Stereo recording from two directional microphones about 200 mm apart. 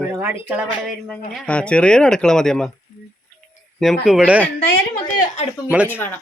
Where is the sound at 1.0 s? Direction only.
5° left (ahead or behind).